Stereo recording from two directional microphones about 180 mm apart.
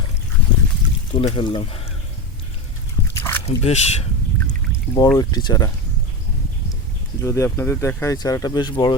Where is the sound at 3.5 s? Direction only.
35° left (ahead or behind).